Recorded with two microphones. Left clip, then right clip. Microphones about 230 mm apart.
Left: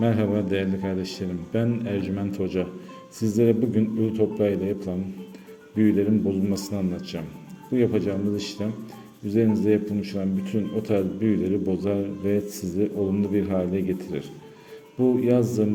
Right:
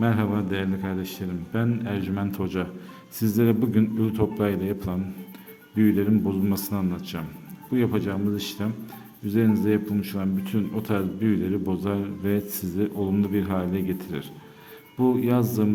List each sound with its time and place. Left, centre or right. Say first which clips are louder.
0.0 s a man's voice: left 2 dB; centre